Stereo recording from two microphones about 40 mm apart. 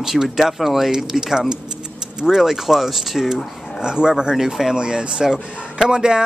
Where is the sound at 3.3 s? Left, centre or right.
Centre.